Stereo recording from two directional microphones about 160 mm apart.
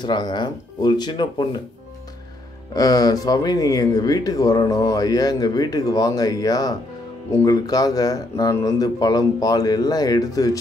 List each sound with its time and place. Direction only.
0.0 s speech: 25° left (ahead or behind)
2.7 s speech: 25° left (ahead or behind)